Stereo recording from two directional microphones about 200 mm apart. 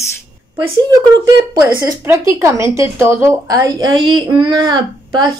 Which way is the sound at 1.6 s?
20° right (ahead or behind).